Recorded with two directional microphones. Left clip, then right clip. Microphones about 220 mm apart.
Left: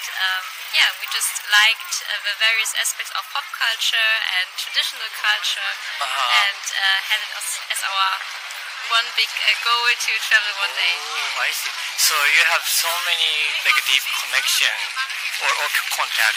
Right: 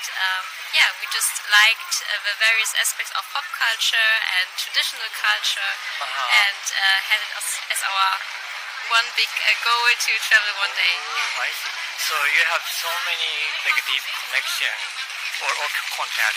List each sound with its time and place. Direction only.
0.2 s a woman's voice: 5° right (ahead or behind)
6.0 s a man's voice: 50° left (ahead or behind)
6.4 s a sound: 5° right (ahead or behind)
7.7 s a woman's voice: 5° right (ahead or behind)
11.1 s a man's voice: 50° left (ahead or behind)